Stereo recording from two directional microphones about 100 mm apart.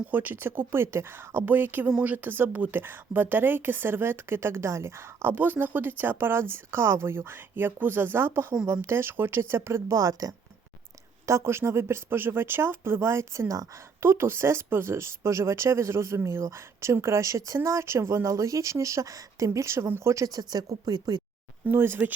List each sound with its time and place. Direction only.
0.1 s speech: 20° right (ahead or behind)
2.1 s speech: 20° right (ahead or behind); by 21.2 s 40° right (ahead or behind)
21.7 s speech: 20° right (ahead or behind)